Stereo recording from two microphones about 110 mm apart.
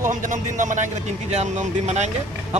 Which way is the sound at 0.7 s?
90° right.